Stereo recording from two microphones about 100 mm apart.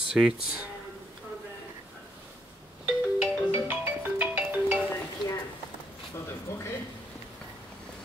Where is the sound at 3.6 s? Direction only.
20° right (ahead or behind).